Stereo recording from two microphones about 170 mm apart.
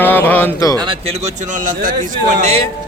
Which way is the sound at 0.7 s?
35° right (ahead or behind).